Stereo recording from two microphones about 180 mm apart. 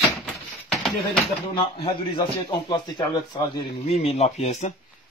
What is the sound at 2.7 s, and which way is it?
Speech, 25° left (ahead or behind).